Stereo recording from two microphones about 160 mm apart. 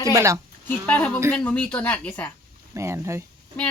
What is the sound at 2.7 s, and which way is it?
Speech, 15° right (ahead or behind).